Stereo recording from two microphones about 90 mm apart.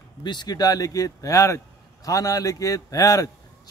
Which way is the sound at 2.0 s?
40° left (ahead or behind).